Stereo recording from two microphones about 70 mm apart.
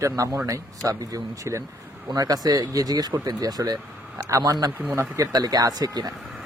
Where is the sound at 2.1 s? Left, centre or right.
Right.